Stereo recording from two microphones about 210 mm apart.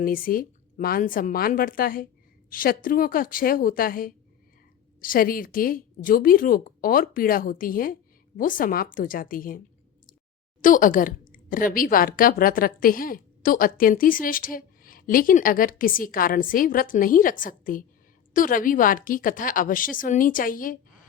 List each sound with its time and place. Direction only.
0.0 s a woman's voice: 40° left (ahead or behind)
10.6 s a woman's voice: 40° left (ahead or behind)